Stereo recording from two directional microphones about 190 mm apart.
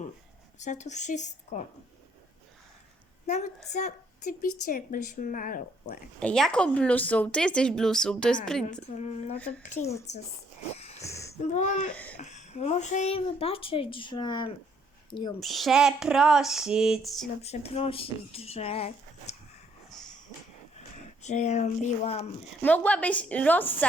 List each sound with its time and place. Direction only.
0.6 s a woman's voice: 40° left (ahead or behind)
3.2 s a woman's voice: 40° left (ahead or behind)
6.1 s speech: 5° left (ahead or behind)
8.9 s a woman's voice: 35° left (ahead or behind)
10.8 s wheeze: 35° left (ahead or behind)
11.0 s a sound: 15° left (ahead or behind)
11.3 s a woman's voice: 40° left (ahead or behind); by 14.5 s 25° left (ahead or behind)
15.4 s speech: centre (ahead or behind)
17.4 s a woman's voice: 35° left (ahead or behind)
20.7 s speech: 35° left (ahead or behind)
22.6 s a woman's voice: 10° left (ahead or behind)